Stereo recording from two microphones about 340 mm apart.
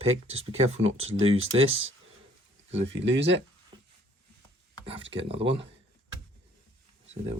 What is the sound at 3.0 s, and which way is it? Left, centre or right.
Speech, right.